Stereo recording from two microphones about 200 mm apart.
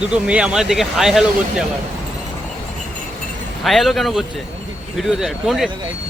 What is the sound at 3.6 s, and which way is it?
Speech, centre (ahead or behind).